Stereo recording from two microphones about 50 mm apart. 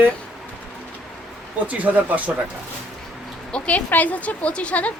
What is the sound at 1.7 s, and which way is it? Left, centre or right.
Speech, right.